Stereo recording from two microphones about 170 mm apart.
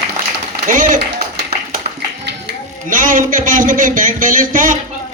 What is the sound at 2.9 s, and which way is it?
A man's voice, 50° right (ahead or behind).